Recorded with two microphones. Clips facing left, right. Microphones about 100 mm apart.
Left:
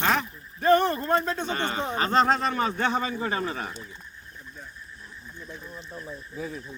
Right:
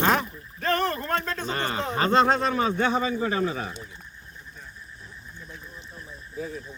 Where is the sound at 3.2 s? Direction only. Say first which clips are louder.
Right 3 dB; 40° left (ahead or behind).